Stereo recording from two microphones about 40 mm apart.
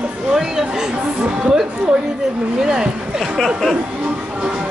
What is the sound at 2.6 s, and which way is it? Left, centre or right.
Speech, centre.